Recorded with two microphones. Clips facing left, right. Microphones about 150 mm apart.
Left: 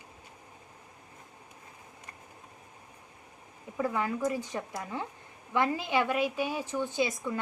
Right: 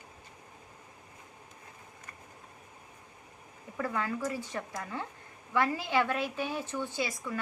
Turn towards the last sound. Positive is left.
turn(degrees=20)  # may be behind; listen again after turning